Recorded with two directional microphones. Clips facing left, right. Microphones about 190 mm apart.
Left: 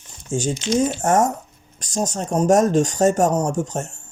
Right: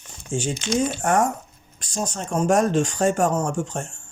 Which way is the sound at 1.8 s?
40° left (ahead or behind).